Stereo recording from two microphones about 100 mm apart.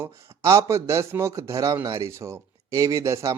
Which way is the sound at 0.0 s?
30° right (ahead or behind).